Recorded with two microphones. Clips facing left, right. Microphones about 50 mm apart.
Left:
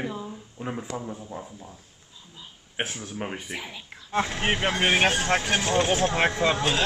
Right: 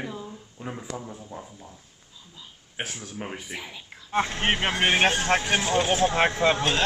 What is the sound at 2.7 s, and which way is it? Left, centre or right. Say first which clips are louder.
Speech: left 3 dB; centre.